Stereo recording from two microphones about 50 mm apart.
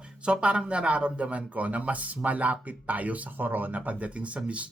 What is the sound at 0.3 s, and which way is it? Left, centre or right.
Speech, right.